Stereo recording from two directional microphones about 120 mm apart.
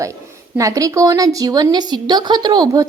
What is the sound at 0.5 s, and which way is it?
A woman's voice, 30° right (ahead or behind).